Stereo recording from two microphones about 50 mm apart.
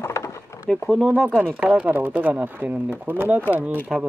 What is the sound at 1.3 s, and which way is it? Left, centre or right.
Speech, right.